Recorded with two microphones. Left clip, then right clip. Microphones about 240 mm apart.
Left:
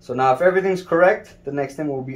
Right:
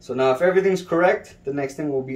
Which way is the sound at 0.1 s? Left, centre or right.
Centre.